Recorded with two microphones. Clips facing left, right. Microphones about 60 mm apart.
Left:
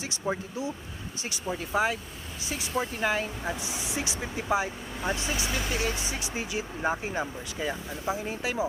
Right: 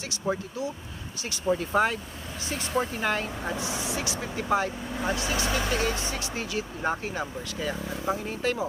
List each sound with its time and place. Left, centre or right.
0.3 s speech: left
1.5 s speech: centre
3.6 s speech: left
5.1 s speech: left
5.7 s speech: centre
8.0 s speech: centre